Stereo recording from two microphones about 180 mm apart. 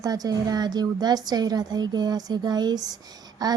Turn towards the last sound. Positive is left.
turn(degrees=-20)  # may be behind; listen again after turning